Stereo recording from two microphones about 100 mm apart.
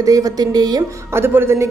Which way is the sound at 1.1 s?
25° right (ahead or behind).